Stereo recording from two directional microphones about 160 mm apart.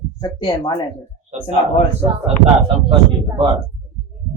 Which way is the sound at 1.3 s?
45° right (ahead or behind).